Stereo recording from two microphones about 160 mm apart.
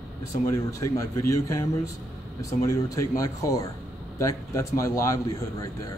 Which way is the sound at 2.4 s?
20° left (ahead or behind).